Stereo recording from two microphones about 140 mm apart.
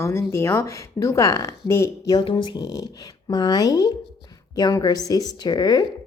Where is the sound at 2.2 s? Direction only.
35° left (ahead or behind).